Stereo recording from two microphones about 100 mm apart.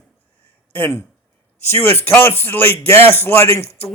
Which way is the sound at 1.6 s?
25° left (ahead or behind).